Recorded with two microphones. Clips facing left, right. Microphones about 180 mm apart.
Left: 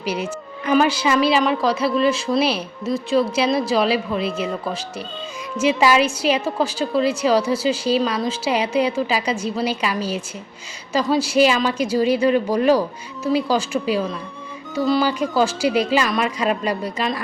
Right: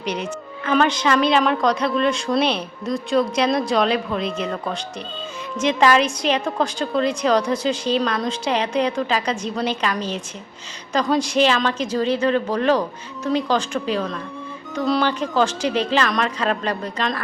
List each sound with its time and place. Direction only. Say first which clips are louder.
0.0 s a woman's voice: left 1 dB; 5° left (ahead or behind)